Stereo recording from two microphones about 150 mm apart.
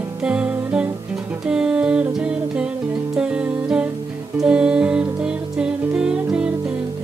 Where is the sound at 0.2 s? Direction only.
5° right (ahead or behind).